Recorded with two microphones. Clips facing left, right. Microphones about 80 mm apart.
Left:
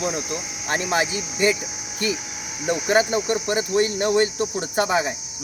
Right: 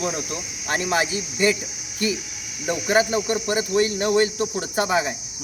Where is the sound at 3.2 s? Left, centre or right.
Left.